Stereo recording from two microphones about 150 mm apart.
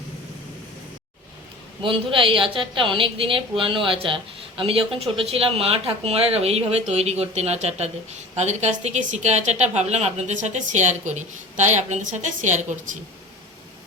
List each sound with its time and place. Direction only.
1.8 s a woman's voice: 35° right (ahead or behind); by 12.6 s 55° right (ahead or behind)